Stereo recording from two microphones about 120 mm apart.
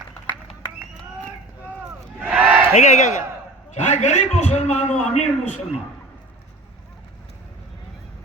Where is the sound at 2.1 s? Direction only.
15° right (ahead or behind).